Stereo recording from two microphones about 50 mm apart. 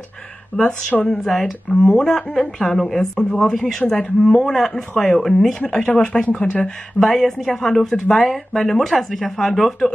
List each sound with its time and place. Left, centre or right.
0.6 s speech: centre
1.0 s speech: centre
4.2 s speech: centre